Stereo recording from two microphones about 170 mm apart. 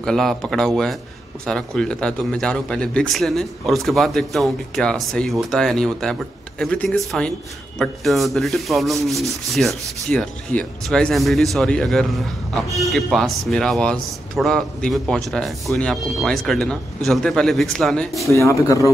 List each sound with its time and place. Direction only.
0.0 s speech: centre (ahead or behind)
18.3 s speech: 15° left (ahead or behind)